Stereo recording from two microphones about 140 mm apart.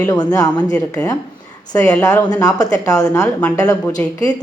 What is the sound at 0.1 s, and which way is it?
Speech, 25° left (ahead or behind).